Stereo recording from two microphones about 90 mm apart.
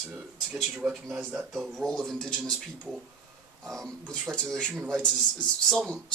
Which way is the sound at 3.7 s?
5° left (ahead or behind).